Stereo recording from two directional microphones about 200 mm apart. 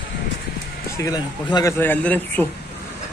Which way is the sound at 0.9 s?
20° left (ahead or behind).